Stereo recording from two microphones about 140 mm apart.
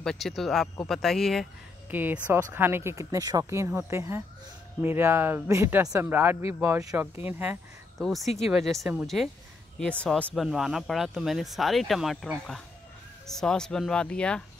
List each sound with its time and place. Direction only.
0.0 s speech: centre (ahead or behind)
1.9 s speech: 15° right (ahead or behind)
8.0 s speech: centre (ahead or behind)